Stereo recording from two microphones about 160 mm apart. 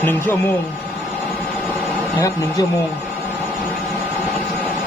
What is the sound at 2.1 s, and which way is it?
Speech, 20° left (ahead or behind).